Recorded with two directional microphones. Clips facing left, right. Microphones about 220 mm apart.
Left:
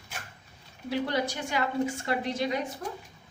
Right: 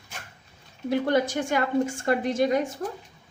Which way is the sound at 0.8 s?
50° right (ahead or behind).